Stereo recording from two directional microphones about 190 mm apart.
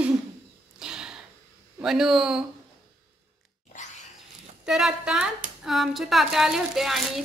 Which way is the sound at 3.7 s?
40° left (ahead or behind).